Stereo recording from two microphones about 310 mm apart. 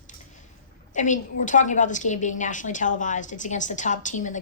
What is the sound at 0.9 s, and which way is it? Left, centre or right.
A woman's voice, left.